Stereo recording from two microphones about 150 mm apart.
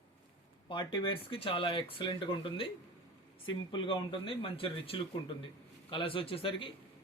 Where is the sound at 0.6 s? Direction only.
35° left (ahead or behind).